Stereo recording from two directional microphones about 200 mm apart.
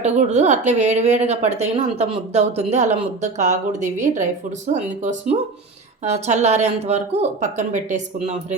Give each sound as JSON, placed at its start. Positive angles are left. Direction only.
{"t": 0.0, "sound": "a woman's voice", "side_deg": -35}